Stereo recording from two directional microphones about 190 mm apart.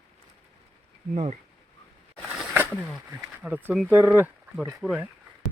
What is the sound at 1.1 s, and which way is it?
Speech, 35° right (ahead or behind).